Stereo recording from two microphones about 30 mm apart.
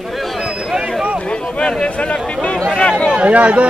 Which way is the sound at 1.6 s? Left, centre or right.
Left.